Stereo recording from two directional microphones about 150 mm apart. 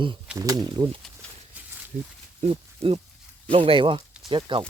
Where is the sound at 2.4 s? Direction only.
40° right (ahead or behind).